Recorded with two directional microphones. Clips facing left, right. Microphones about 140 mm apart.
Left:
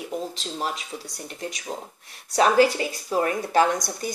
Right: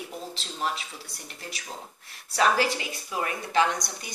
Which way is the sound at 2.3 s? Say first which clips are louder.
Left 6 dB; 35° left (ahead or behind).